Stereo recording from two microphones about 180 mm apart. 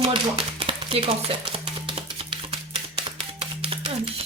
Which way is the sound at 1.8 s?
30° right (ahead or behind).